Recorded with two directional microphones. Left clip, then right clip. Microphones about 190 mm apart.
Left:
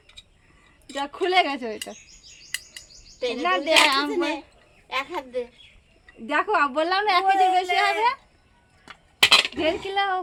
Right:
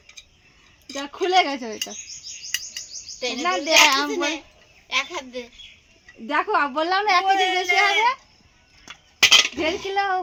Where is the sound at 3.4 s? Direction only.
35° right (ahead or behind).